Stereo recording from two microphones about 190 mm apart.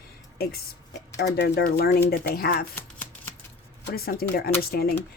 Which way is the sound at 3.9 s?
50° left (ahead or behind).